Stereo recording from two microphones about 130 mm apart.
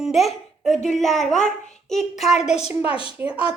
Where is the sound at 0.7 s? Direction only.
65° left (ahead or behind).